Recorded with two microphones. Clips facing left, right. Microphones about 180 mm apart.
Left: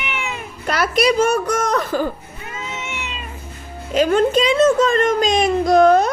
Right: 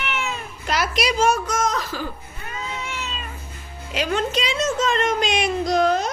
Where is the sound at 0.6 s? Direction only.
55° left (ahead or behind).